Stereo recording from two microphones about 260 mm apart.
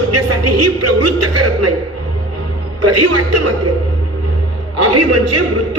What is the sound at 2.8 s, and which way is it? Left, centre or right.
Speech, right.